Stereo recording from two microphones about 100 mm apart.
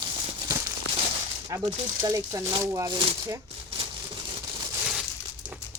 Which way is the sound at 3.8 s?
70° right (ahead or behind).